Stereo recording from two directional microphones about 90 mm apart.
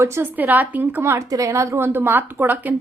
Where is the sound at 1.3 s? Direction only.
40° right (ahead or behind); by 2.7 s 20° right (ahead or behind).